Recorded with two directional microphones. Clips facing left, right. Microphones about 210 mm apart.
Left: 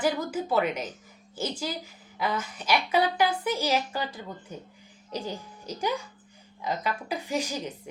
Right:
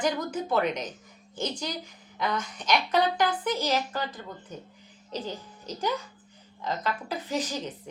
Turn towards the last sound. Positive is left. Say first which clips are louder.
# even
turn(degrees=10)  # may be behind; listen again after turning